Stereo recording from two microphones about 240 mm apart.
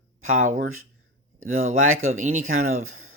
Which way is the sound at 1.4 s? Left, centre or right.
Right.